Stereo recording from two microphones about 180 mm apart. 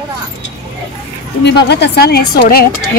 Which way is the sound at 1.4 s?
70° left (ahead or behind).